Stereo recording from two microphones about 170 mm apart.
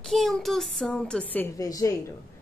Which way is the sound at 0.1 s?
Centre (ahead or behind).